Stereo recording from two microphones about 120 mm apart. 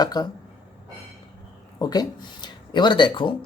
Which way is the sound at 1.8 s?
35° left (ahead or behind).